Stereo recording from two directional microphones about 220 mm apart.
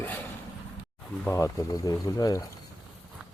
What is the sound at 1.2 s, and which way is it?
Speech, 15° left (ahead or behind).